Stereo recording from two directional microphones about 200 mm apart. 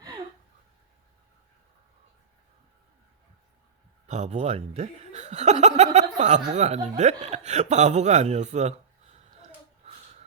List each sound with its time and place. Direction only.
4.0 s speech: 35° right (ahead or behind)